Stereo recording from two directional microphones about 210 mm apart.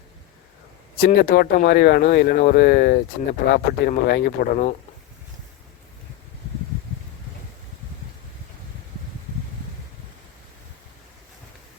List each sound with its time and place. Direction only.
0.9 s speech: 45° left (ahead or behind)